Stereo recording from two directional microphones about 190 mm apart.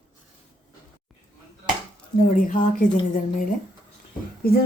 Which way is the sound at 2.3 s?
45° left (ahead or behind).